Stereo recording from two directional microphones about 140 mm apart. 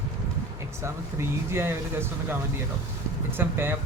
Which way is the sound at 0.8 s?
20° right (ahead or behind).